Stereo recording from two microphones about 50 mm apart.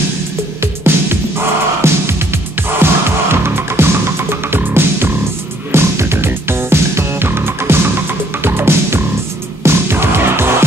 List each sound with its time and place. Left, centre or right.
0.6 s music: right
1.8 s music: right
2.8 s music: right
5.7 s music: right